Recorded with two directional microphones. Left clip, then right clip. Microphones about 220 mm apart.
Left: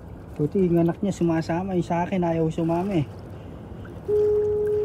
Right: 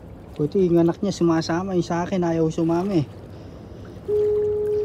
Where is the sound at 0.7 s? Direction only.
10° right (ahead or behind).